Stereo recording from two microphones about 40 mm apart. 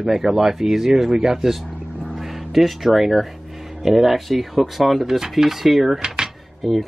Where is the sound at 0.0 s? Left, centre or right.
Centre.